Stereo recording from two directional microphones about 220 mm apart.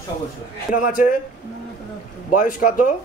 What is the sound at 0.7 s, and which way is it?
Speech, 40° left (ahead or behind).